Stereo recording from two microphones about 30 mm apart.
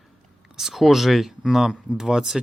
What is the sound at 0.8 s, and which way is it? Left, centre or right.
Speech, centre.